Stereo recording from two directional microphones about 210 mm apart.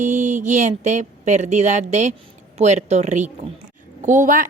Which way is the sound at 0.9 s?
35° right (ahead or behind).